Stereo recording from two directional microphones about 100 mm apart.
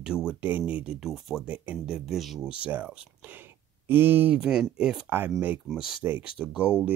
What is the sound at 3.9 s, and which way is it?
Speech, 20° right (ahead or behind).